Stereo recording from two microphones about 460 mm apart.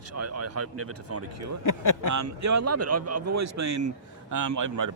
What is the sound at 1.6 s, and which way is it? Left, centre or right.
Speech, left.